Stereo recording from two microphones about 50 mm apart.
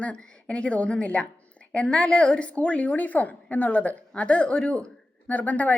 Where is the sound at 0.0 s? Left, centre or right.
Left.